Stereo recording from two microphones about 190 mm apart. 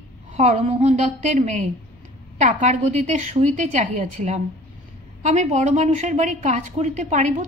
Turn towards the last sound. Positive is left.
turn(degrees=-40)  # may be behind; listen again after turning